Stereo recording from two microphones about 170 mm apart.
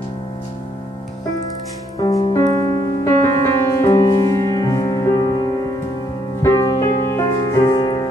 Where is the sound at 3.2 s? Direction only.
15° left (ahead or behind).